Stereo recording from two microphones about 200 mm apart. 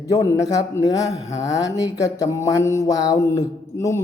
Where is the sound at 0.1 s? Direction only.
15° left (ahead or behind).